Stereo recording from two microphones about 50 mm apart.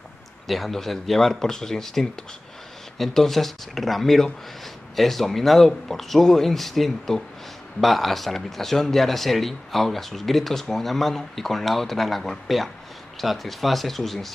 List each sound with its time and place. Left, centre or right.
0.5 s speech: centre